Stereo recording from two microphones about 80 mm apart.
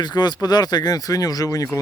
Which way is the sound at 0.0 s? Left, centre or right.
Left.